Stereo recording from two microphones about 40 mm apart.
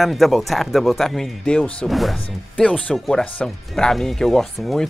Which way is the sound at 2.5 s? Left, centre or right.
Left.